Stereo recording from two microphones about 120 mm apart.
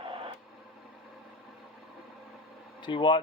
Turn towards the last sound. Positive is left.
turn(degrees=40)  # may be behind; listen again after turning